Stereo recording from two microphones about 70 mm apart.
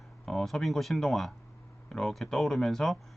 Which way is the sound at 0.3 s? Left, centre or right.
Centre.